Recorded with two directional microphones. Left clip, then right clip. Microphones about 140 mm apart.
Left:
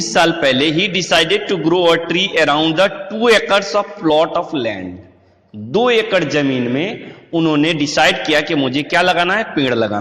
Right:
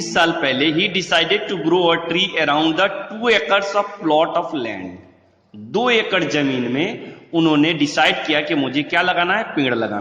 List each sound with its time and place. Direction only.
0.0 s a man's voice: 30° left (ahead or behind)
7.6 s a man's voice: 25° left (ahead or behind)